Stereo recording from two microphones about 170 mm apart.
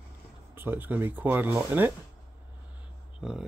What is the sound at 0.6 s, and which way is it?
Speech, 10° right (ahead or behind).